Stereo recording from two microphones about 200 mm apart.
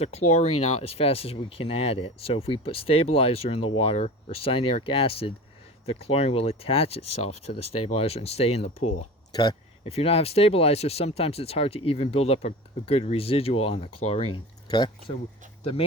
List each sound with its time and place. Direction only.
0.0 s speech: 30° left (ahead or behind)
9.3 s speech: 20° left (ahead or behind)
14.3 s a sound: 20° left (ahead or behind)